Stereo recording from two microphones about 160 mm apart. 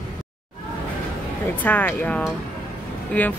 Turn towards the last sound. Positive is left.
turn(degrees=10)  # may be behind; listen again after turning